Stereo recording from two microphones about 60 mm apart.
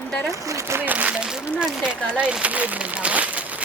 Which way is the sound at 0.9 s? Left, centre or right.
Right.